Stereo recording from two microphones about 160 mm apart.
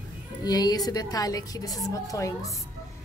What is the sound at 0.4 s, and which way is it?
A woman's voice, 25° left (ahead or behind).